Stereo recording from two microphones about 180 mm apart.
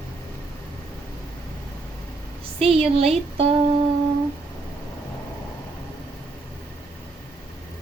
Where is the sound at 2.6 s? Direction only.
35° right (ahead or behind).